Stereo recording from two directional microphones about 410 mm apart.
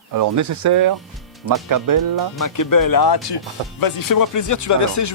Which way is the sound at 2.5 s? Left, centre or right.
Left.